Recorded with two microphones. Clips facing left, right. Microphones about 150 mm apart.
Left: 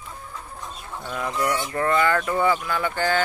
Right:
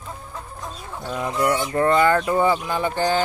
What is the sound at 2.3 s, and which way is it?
Speech, 35° right (ahead or behind).